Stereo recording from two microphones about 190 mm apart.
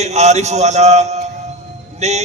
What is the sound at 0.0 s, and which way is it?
A man's voice, 35° right (ahead or behind).